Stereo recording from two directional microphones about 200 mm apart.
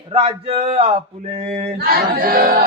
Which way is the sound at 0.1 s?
30° right (ahead or behind).